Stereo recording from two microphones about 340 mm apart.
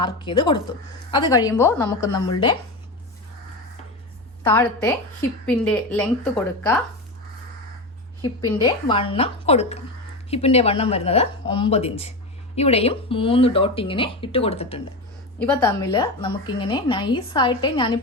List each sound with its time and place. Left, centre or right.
0.0 s a woman's voice: centre
4.4 s a woman's voice: centre
8.2 s a woman's voice: centre
15.4 s a woman's voice: centre